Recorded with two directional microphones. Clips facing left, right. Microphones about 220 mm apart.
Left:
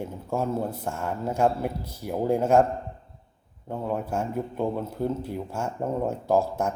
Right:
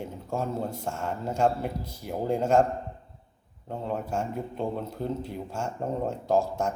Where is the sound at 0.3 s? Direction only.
5° left (ahead or behind).